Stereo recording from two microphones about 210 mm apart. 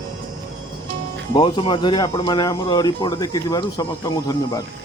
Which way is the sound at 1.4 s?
25° left (ahead or behind).